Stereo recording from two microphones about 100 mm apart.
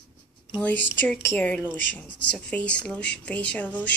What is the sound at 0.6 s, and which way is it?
Speech, 15° left (ahead or behind).